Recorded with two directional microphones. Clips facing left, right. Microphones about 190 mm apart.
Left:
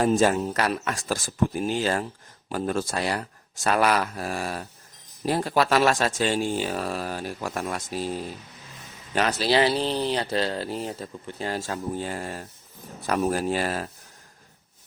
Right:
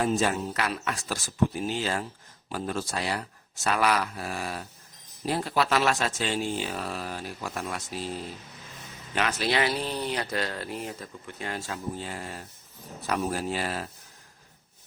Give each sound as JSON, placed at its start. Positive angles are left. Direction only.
{"t": 0.0, "sound": "speech", "side_deg": 45}
{"t": 9.1, "sound": "speech", "side_deg": 35}